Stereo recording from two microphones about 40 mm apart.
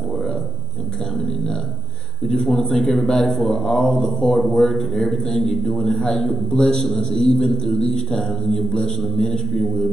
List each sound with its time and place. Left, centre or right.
1.1 s a sound: centre
2.3 s a man's voice: centre
7.4 s a man's voice: centre
8.2 s a man's voice: centre
9.2 s a man's voice: left